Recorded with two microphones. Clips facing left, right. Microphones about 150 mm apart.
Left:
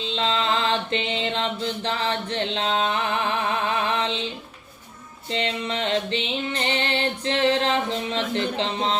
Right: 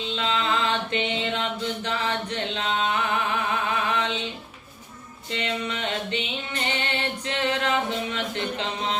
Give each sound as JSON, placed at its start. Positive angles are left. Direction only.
{"t": 0.0, "sound": "mantra", "side_deg": 30}
{"t": 3.8, "sound": "music", "side_deg": 30}
{"t": 5.3, "sound": "music", "side_deg": 30}